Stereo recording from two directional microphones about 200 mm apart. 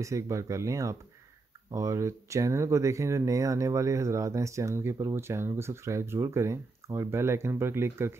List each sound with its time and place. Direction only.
0.0 s speech: 15° right (ahead or behind)